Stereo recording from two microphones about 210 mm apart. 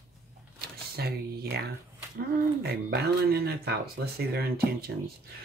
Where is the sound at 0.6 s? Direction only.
50° right (ahead or behind).